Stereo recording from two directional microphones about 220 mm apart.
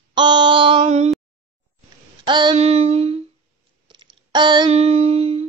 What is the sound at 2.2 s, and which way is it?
Child singing, 20° right (ahead or behind).